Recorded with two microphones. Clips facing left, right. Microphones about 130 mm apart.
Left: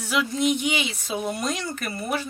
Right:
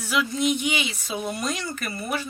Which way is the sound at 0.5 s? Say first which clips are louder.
Left 1 dB; centre (ahead or behind).